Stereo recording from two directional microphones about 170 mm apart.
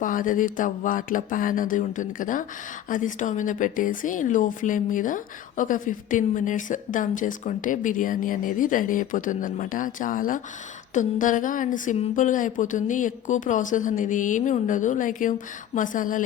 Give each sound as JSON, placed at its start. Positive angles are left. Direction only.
{"t": 0.0, "sound": "speech", "side_deg": 50}